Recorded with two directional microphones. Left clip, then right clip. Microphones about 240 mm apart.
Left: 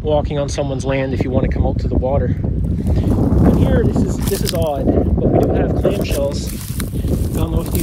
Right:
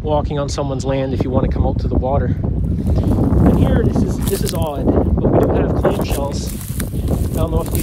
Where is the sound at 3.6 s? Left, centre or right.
Centre.